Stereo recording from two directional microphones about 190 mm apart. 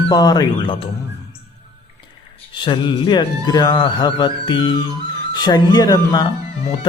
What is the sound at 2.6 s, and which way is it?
Music, 25° left (ahead or behind).